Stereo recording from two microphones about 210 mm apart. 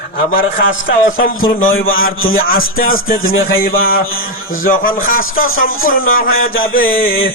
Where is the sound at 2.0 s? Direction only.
70° left (ahead or behind).